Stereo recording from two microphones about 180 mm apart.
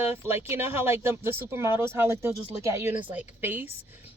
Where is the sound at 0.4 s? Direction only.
15° right (ahead or behind).